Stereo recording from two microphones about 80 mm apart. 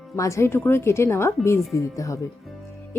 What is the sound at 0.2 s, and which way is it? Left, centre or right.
Speech, left.